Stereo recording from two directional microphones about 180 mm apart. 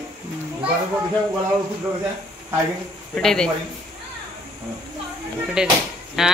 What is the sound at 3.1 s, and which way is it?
Speech, 5° left (ahead or behind).